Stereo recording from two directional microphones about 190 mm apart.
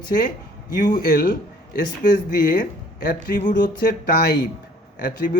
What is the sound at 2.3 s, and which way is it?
Speech, 50° left (ahead or behind).